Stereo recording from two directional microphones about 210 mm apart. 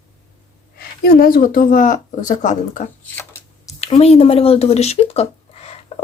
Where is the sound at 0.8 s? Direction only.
45° left (ahead or behind).